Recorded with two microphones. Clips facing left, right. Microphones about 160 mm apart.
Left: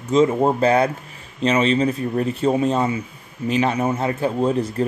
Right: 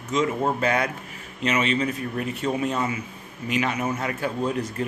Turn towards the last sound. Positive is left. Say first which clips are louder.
# left 6 dB
turn(degrees=30)  # may be behind; listen again after turning